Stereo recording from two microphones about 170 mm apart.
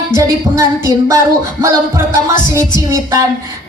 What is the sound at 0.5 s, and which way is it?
Speech, 20° right (ahead or behind).